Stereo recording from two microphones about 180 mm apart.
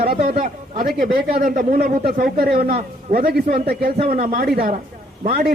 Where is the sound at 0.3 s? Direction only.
55° right (ahead or behind).